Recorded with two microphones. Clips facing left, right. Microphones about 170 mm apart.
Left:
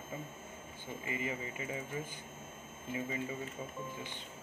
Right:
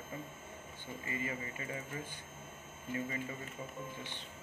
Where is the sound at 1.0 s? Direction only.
20° left (ahead or behind).